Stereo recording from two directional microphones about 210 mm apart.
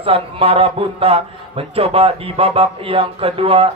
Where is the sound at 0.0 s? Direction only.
25° right (ahead or behind).